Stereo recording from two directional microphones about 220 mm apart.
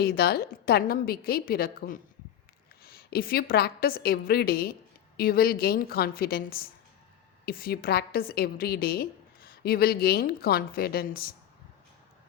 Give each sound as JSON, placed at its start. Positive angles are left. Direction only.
{"t": 0.0, "sound": "a woman's voice", "side_deg": 45}